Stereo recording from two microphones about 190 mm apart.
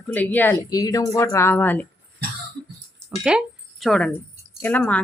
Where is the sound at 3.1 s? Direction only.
5° right (ahead or behind).